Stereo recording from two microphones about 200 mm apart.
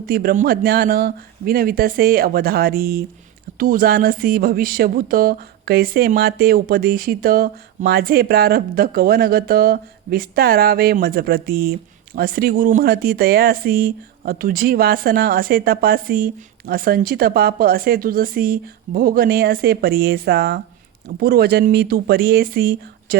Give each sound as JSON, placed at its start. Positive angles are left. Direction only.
{"t": 0.0, "sound": "speech", "side_deg": -50}